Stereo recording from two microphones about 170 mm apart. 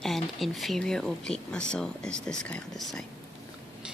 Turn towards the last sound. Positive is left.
turn(degrees=0)  # may be behind; listen again after turning